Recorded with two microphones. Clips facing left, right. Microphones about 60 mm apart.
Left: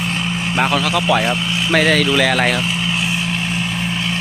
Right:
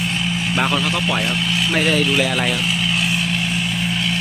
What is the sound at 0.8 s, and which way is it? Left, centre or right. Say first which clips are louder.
Speech: left 3 dB; left.